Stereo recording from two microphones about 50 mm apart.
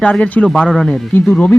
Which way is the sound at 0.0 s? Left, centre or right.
Left.